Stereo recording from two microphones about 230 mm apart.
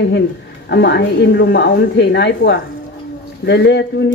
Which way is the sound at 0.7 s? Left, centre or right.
Left.